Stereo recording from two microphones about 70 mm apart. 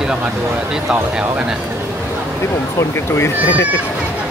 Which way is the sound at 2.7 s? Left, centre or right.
Left.